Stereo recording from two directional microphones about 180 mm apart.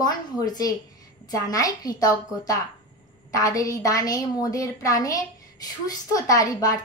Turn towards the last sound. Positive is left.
turn(degrees=20)  # may be behind; listen again after turning